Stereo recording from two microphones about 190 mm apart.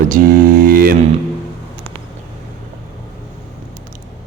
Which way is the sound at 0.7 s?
50° right (ahead or behind).